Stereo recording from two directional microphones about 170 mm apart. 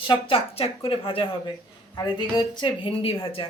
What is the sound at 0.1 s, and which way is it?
A woman's voice, 30° left (ahead or behind).